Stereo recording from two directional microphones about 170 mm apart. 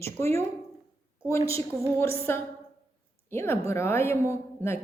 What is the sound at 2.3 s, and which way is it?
A man's voice, 15° left (ahead or behind).